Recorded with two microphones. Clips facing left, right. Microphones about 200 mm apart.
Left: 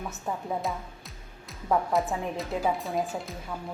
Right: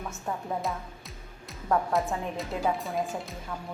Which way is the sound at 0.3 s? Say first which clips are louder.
Left 1 dB; centre (ahead or behind).